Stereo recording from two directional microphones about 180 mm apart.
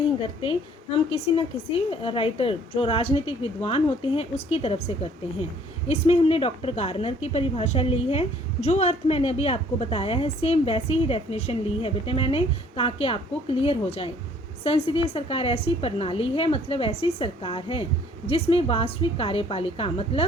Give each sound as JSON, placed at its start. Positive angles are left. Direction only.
{"t": 0.2, "sound": "a woman's voice", "side_deg": 30}